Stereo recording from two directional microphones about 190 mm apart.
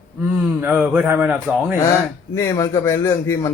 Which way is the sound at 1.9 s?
15° left (ahead or behind).